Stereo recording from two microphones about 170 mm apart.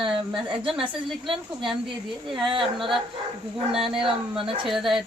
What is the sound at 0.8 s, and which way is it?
Speech, 30° right (ahead or behind).